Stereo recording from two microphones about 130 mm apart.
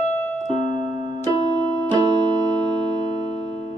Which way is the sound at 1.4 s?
35° right (ahead or behind).